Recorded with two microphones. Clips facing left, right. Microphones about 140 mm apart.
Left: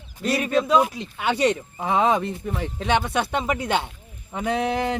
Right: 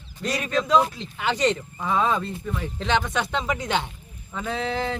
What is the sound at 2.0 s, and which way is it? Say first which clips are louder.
Speech: left 4 dB; 20° left (ahead or behind).